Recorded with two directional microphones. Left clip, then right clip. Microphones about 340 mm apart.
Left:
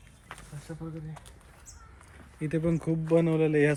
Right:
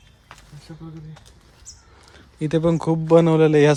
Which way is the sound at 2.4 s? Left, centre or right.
Centre.